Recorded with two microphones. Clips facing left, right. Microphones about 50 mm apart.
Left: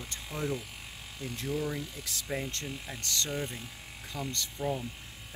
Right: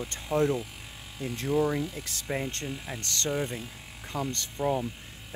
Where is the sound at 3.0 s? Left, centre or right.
Right.